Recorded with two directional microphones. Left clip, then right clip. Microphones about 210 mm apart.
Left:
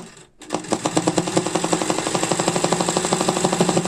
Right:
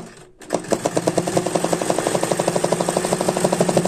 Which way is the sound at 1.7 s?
25° left (ahead or behind).